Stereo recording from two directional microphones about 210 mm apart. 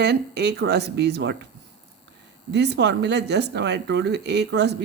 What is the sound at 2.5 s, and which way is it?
Speech, 55° right (ahead or behind).